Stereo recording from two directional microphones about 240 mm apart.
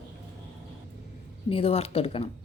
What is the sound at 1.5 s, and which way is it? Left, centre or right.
Speech, left.